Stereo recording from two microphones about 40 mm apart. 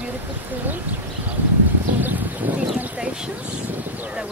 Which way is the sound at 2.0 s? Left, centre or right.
Right.